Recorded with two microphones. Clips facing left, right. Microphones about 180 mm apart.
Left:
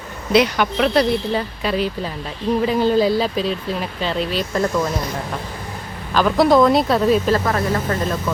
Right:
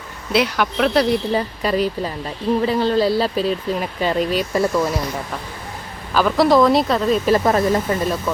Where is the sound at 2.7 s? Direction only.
5° left (ahead or behind).